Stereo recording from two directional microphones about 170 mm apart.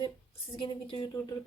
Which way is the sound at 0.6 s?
30° left (ahead or behind).